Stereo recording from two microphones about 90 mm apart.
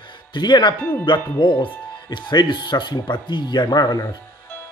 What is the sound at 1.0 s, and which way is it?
Speech, 70° left (ahead or behind).